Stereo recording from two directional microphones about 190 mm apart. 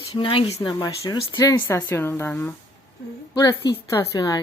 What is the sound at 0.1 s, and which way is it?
A woman's voice, 25° left (ahead or behind).